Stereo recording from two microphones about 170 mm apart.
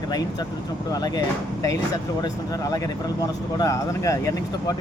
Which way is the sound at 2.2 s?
20° left (ahead or behind).